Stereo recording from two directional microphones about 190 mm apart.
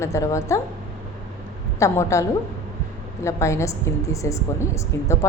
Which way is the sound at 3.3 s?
15° left (ahead or behind).